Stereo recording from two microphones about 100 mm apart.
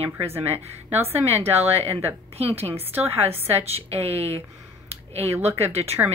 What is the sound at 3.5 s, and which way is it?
Speech, 90° right.